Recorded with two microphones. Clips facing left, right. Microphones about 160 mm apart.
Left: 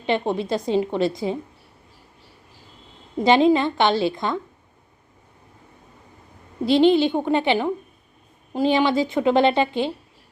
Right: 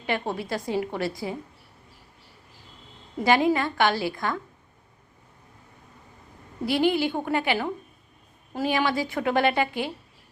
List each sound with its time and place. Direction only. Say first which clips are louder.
0.0 s a woman's voice: left 6 dB; 25° left (ahead or behind)
3.2 s a woman's voice: left 5 dB; 20° left (ahead or behind)
6.6 s a woman's voice: left 7 dB; 25° left (ahead or behind)